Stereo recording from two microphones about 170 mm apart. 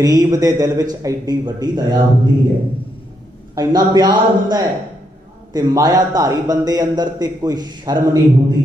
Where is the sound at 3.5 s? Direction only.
25° right (ahead or behind).